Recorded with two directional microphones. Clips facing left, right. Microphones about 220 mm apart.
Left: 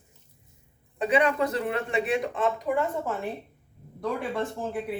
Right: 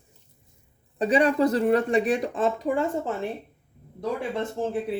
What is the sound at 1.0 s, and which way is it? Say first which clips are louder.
Speech: right 3 dB; 35° right (ahead or behind).